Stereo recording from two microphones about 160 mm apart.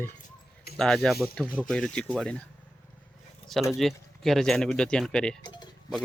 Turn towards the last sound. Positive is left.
turn(degrees=25)  # may be behind; listen again after turning